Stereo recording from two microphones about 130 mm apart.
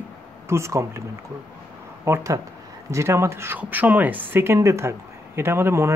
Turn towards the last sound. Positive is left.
turn(degrees=-20)  # may be behind; listen again after turning